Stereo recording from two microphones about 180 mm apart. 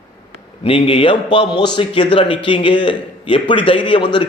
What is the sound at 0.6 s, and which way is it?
A man's voice, 30° left (ahead or behind).